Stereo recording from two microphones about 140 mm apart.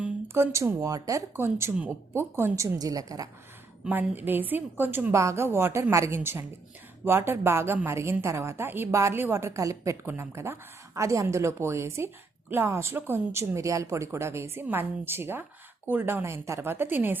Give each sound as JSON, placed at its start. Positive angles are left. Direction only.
{"t": 0.0, "sound": "a woman's voice", "side_deg": -20}
{"t": 3.8, "sound": "a woman's voice", "side_deg": -15}